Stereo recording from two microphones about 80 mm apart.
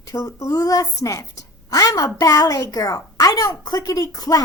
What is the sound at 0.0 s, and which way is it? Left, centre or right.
A woman's voice, left.